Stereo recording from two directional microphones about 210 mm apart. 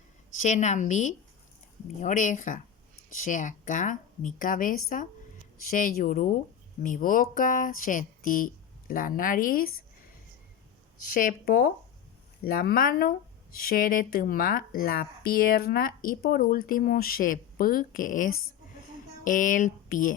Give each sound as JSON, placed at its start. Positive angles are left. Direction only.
{"t": 0.3, "sound": "speech", "side_deg": 35}
{"t": 6.0, "sound": "speech", "side_deg": 40}
{"t": 11.0, "sound": "speech", "side_deg": 40}